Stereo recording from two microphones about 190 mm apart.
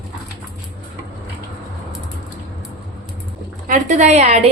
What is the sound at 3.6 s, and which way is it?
Speech, 40° right (ahead or behind).